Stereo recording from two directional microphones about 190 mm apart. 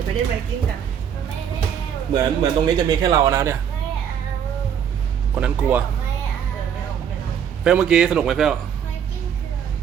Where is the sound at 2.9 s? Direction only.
15° right (ahead or behind).